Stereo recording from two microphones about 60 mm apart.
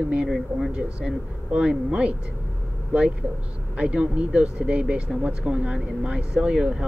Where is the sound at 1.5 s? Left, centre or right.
Centre.